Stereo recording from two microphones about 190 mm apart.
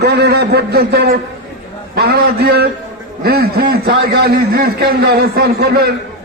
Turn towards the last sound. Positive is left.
turn(degrees=-55)  # may be behind; listen again after turning